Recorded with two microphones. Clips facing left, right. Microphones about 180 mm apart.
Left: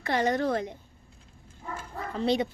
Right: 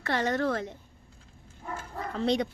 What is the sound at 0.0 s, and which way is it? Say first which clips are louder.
Speech: left 2 dB; 15° left (ahead or behind).